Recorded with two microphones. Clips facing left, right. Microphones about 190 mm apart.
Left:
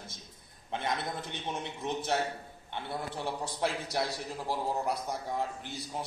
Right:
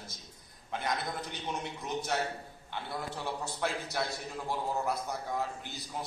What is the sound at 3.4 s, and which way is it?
A man's voice, 30° left (ahead or behind).